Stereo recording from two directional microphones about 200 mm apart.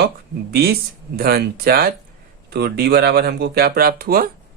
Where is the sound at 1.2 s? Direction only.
50° right (ahead or behind).